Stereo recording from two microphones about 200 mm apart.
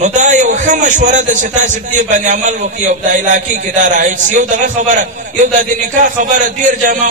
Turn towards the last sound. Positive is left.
turn(degrees=-40)  # may be behind; listen again after turning